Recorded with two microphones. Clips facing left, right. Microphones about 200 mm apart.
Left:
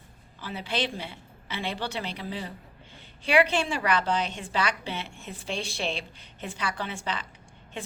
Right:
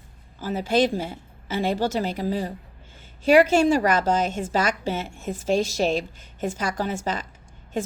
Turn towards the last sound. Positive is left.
turn(degrees=-40)  # may be behind; listen again after turning